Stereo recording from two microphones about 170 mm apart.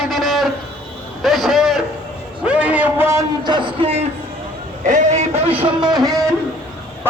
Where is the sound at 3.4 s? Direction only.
25° right (ahead or behind).